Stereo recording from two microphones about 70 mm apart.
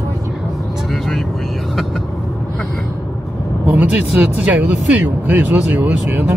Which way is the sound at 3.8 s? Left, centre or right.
Right.